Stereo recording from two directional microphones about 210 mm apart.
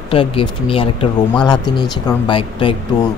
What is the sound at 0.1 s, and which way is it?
Speech, 25° left (ahead or behind).